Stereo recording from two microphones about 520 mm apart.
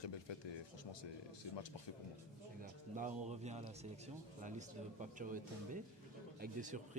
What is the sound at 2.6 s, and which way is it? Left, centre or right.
Speech, centre.